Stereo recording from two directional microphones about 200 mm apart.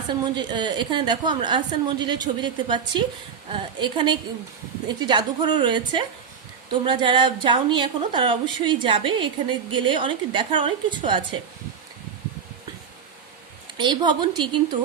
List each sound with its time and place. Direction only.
0.2 s a woman's voice: 20° right (ahead or behind)
13.7 s a woman's voice: 20° right (ahead or behind)